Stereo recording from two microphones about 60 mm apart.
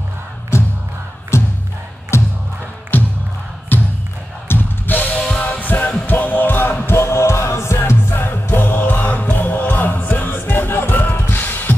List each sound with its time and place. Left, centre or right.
1.3 s music: left
2.9 s a sound: left
5.3 s music: left
6.9 s music: left